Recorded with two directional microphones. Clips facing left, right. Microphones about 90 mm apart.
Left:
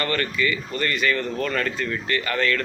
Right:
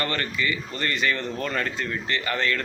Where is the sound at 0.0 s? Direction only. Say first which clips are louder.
Left 3 dB; 25° right (ahead or behind).